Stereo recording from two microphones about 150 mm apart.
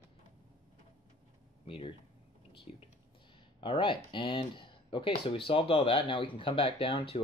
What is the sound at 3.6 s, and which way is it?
Speech, 35° left (ahead or behind).